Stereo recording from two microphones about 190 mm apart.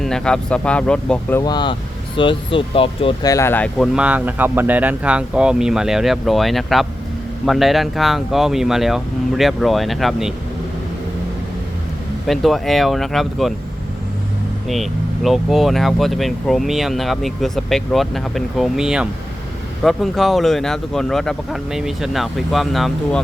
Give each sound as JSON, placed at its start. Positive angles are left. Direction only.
{"t": 0.0, "sound": "speech", "side_deg": 5}
{"t": 3.3, "sound": "speech", "side_deg": 10}
{"t": 3.9, "sound": "speech", "side_deg": -5}
{"t": 12.3, "sound": "speech", "side_deg": 0}
{"t": 14.7, "sound": "speech", "side_deg": 0}